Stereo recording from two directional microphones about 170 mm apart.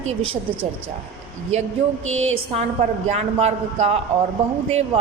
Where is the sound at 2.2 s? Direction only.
40° right (ahead or behind).